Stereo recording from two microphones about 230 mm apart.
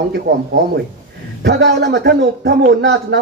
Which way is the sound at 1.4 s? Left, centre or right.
Right.